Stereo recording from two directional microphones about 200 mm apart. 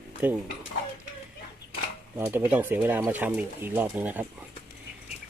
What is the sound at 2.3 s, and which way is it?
Speech, 10° right (ahead or behind).